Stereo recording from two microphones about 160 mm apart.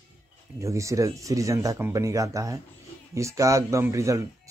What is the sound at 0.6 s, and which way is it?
Speech, 20° right (ahead or behind).